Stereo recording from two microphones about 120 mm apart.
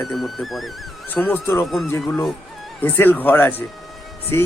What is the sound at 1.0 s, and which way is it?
Speech, 15° left (ahead or behind).